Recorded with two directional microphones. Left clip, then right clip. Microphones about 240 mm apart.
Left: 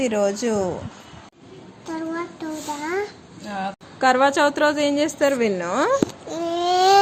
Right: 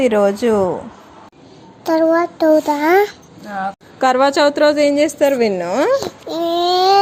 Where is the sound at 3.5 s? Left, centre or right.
Centre.